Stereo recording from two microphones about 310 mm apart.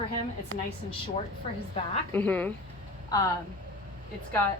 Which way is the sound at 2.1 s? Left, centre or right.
Centre.